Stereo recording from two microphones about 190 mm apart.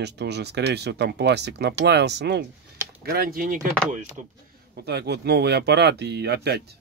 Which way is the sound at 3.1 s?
50° right (ahead or behind).